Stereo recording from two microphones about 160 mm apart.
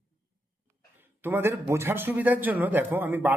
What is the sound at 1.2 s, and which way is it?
Speech, 15° right (ahead or behind).